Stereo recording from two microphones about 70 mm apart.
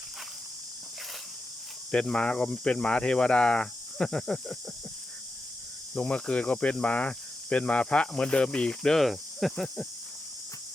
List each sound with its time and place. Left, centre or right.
1.9 s cricket: centre
5.9 s cricket: centre